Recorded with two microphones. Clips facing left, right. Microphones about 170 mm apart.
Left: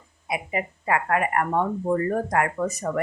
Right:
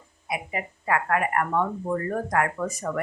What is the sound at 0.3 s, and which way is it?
Speech, 20° left (ahead or behind).